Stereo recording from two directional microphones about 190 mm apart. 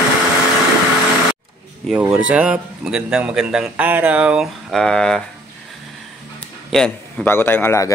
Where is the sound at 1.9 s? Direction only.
5° right (ahead or behind).